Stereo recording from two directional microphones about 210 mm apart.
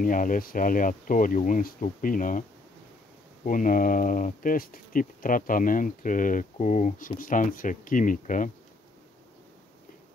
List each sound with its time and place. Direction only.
0.0 s speech: 40° left (ahead or behind)
3.4 s speech: 40° left (ahead or behind)